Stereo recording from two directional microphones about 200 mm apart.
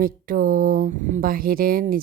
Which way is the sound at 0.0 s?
45° right (ahead or behind).